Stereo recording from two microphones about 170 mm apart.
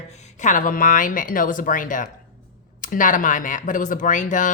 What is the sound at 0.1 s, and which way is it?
Speech, 40° left (ahead or behind).